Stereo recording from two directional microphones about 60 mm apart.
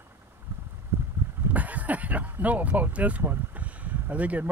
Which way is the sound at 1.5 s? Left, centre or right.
Right.